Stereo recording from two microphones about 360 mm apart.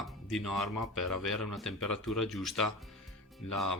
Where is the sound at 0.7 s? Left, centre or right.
Left.